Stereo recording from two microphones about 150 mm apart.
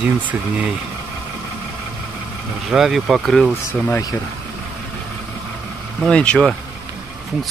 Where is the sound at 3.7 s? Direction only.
15° left (ahead or behind).